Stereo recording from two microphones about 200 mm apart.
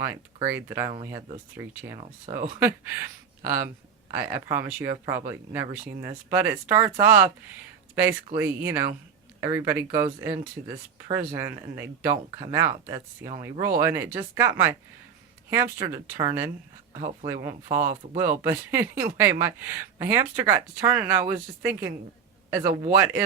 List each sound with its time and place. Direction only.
0.0 s speech: 15° right (ahead or behind)
2.0 s speech: 25° right (ahead or behind)
3.4 s speech: 10° right (ahead or behind)
8.4 s speech: 10° right (ahead or behind)
18.1 s speech: 40° right (ahead or behind)
18.4 s speech: 10° right (ahead or behind)